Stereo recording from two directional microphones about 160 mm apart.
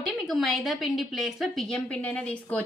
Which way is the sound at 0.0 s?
Centre (ahead or behind).